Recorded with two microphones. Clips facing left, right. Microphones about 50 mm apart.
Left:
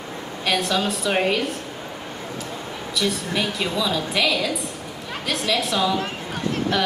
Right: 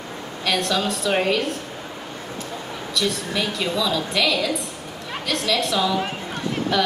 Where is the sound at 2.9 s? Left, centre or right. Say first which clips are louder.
Even; centre.